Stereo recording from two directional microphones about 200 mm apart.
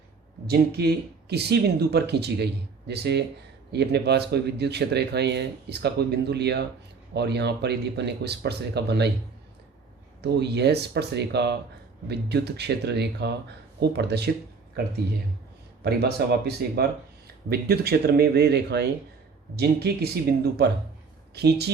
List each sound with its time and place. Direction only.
0.4 s speech: 55° right (ahead or behind)
10.2 s speech: 55° right (ahead or behind)
15.8 s speech: 55° right (ahead or behind)